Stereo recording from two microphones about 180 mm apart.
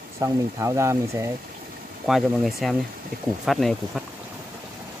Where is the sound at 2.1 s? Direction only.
Centre (ahead or behind).